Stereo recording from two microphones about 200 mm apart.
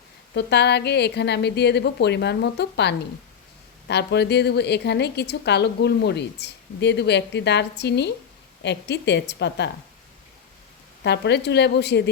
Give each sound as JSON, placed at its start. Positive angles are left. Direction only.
{"t": 0.3, "sound": "a woman's voice", "side_deg": 55}
{"t": 11.0, "sound": "a woman's voice", "side_deg": 60}